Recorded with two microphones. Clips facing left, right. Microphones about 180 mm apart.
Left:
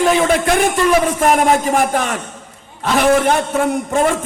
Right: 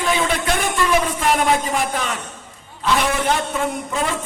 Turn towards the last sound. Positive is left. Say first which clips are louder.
# left 7 dB
turn(degrees=45)  # may be behind; listen again after turning